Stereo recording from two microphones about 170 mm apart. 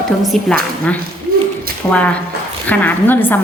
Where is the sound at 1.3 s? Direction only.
60° right (ahead or behind).